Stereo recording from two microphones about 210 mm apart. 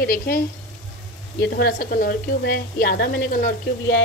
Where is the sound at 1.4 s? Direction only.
50° left (ahead or behind).